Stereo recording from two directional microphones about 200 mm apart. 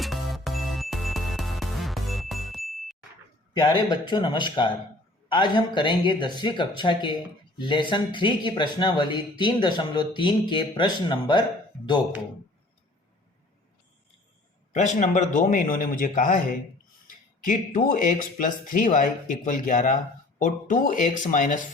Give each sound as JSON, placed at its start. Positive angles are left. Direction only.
{"t": 0.0, "sound": "music", "side_deg": 0}
{"t": 3.6, "sound": "speech", "side_deg": 20}
{"t": 14.7, "sound": "speech", "side_deg": 35}
{"t": 17.4, "sound": "speech", "side_deg": 40}